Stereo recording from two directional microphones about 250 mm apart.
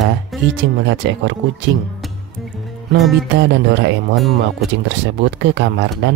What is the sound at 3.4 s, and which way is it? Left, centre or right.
Speech, right.